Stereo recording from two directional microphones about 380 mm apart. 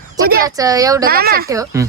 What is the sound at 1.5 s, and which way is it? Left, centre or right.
Speech, centre.